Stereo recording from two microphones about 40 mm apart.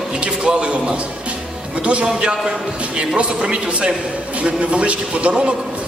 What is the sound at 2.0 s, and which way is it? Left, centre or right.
A man's voice, right.